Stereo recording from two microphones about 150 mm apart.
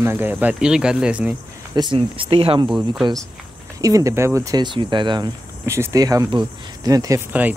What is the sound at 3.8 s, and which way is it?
Speech, 20° right (ahead or behind).